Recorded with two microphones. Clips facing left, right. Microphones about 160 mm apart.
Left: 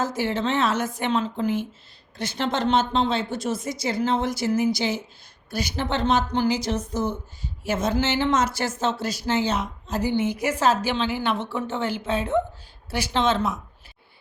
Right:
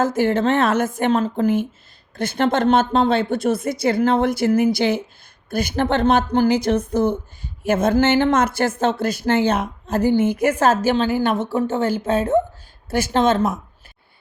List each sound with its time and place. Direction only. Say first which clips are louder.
0.0 s a woman's voice: right 7 dB; 50° right (ahead or behind)